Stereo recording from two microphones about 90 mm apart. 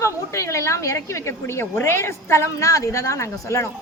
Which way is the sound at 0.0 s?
35° left (ahead or behind).